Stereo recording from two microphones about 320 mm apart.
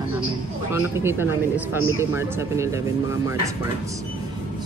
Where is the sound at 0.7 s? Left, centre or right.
Centre.